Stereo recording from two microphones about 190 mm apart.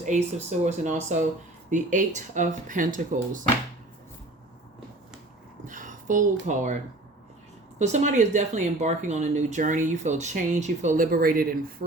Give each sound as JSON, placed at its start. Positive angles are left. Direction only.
{"t": 0.0, "sound": "speech", "side_deg": -40}
{"t": 5.6, "sound": "a sound", "side_deg": -45}
{"t": 7.8, "sound": "speech", "side_deg": -40}